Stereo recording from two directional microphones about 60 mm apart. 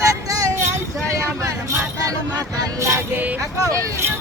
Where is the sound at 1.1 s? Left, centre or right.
Right.